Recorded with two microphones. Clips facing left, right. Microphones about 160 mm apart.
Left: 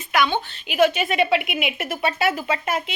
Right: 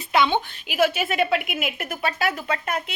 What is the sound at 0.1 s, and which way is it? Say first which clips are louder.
Speech: right 1 dB; 20° right (ahead or behind).